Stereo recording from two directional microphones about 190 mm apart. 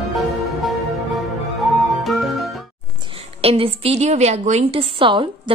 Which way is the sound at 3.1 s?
30° right (ahead or behind).